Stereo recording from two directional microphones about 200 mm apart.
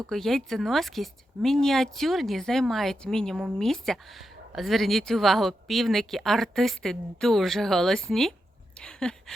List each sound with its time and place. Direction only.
0.1 s speech: centre (ahead or behind)